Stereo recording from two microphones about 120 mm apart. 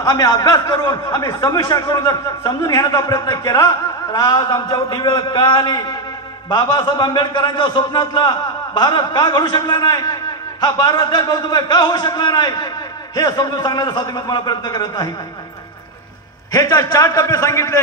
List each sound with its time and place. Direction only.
0.0 s a man's voice: 30° left (ahead or behind)
16.5 s a man's voice: 30° left (ahead or behind)